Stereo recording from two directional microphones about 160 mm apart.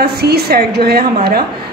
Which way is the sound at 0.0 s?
85° right.